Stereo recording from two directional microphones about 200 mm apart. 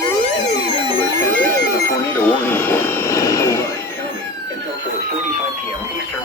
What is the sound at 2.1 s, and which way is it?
Vehicle, 10° left (ahead or behind).